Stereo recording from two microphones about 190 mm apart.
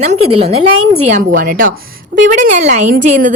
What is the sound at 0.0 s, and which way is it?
A woman's voice, 35° right (ahead or behind).